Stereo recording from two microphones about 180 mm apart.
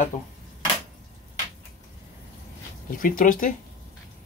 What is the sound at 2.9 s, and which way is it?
Speech, 50° left (ahead or behind).